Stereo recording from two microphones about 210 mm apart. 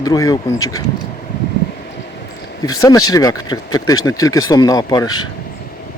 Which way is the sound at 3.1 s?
15° left (ahead or behind).